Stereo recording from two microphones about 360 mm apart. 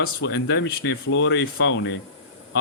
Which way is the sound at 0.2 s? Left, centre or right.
Left.